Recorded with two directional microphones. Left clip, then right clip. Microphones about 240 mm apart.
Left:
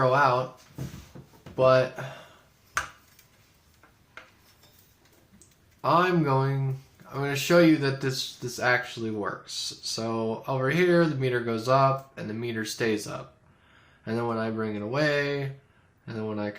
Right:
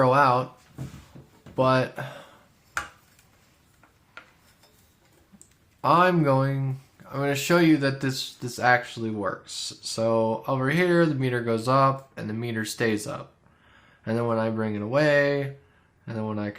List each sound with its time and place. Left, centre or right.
0.0 s a sound: right
1.5 s speech: right
5.8 s speech: right